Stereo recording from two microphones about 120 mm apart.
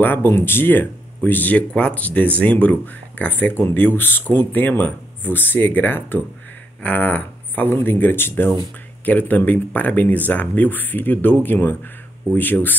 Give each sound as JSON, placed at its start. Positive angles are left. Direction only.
{"t": 0.0, "sound": "speech", "side_deg": 20}